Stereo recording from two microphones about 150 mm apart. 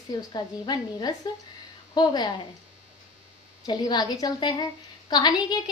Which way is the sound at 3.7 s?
30° left (ahead or behind).